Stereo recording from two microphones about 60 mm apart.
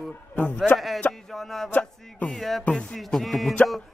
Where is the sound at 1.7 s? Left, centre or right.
Left.